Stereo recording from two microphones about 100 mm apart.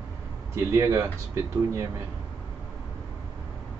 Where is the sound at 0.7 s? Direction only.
30° right (ahead or behind).